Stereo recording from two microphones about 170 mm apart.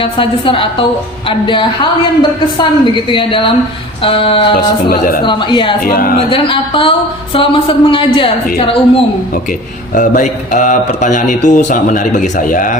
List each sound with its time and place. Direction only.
0.0 s a woman's voice: 30° left (ahead or behind)
4.9 s speech: 55° left (ahead or behind)
5.2 s a woman's voice: 25° left (ahead or behind)
5.8 s speech: 60° left (ahead or behind)
6.1 s speech: 30° left (ahead or behind)
9.9 s speech: 50° left (ahead or behind)